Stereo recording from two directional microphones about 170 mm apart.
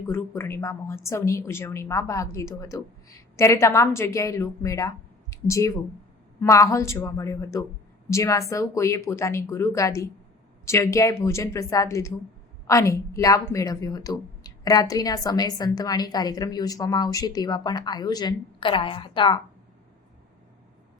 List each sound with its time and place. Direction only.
0.1 s a woman's voice: 15° left (ahead or behind)